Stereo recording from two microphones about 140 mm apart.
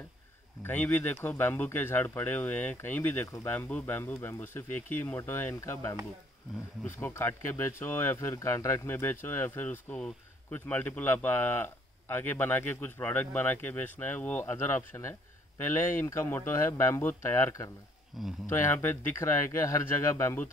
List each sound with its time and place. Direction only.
0.7 s speech: 10° left (ahead or behind)
7.0 s speech: 15° left (ahead or behind)
18.1 s speech: centre (ahead or behind)
18.5 s speech: 15° left (ahead or behind)